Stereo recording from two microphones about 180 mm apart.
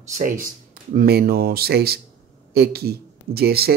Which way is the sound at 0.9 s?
55° right (ahead or behind).